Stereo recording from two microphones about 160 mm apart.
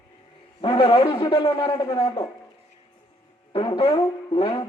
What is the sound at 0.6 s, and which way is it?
Speech, 30° left (ahead or behind).